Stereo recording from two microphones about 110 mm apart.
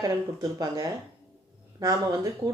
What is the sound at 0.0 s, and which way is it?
Speech, 30° right (ahead or behind).